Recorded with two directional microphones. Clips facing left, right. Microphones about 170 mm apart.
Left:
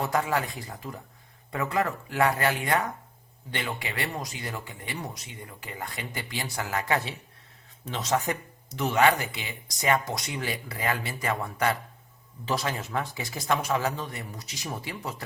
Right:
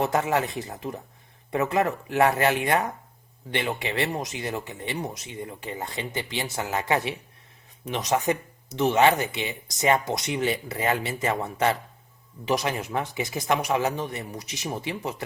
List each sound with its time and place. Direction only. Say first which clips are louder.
0.0 s speech: right 3 dB; 25° right (ahead or behind)